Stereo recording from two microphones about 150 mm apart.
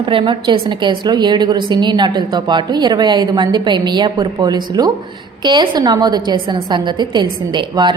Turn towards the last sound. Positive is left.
turn(degrees=-30)  # may be behind; listen again after turning